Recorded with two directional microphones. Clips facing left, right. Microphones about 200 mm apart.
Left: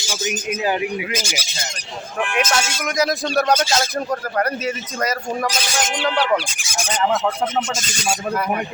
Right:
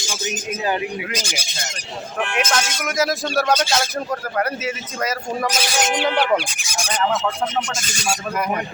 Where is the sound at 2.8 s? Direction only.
Centre (ahead or behind).